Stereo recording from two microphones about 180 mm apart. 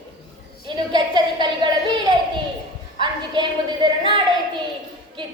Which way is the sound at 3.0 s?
25° right (ahead or behind).